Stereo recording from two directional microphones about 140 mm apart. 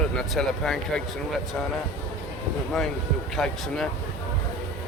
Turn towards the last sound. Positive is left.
turn(degrees=0)  # may be behind; listen again after turning